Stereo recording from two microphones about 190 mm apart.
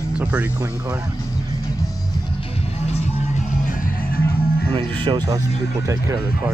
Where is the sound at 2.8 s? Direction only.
35° left (ahead or behind).